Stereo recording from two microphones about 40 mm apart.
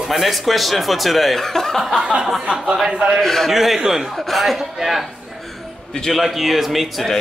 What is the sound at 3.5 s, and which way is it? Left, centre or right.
Speech, centre.